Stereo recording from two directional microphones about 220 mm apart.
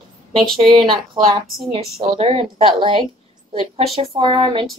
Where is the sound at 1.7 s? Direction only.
25° right (ahead or behind).